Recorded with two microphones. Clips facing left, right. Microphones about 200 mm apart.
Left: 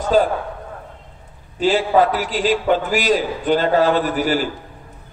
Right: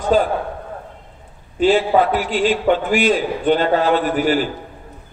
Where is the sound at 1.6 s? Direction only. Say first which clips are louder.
Right 1 dB; 40° left (ahead or behind).